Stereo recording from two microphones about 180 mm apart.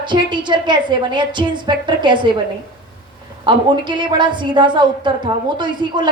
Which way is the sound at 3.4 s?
25° right (ahead or behind).